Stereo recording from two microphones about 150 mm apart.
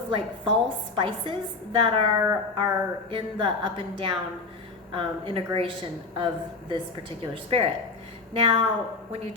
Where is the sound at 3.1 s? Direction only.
35° right (ahead or behind).